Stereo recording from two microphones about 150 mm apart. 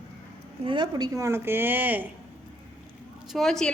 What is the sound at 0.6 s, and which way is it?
A woman's voice, 30° right (ahead or behind).